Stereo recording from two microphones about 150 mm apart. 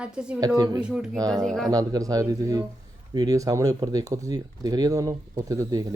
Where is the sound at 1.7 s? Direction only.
25° right (ahead or behind).